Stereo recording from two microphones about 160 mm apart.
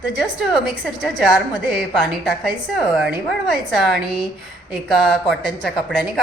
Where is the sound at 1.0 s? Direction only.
Centre (ahead or behind).